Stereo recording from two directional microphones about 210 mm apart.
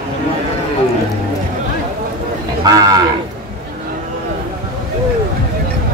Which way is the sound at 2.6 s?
15° right (ahead or behind).